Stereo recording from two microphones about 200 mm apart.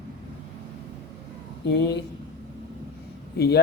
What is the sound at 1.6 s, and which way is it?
Speech, 60° left (ahead or behind).